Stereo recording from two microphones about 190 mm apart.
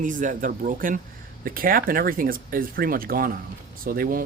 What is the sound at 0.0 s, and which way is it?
Speech, 45° right (ahead or behind).